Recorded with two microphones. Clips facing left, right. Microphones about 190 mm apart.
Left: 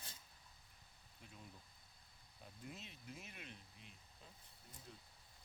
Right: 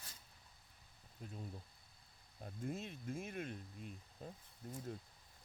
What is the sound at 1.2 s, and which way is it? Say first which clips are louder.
Speech: right 10 dB; 40° right (ahead or behind).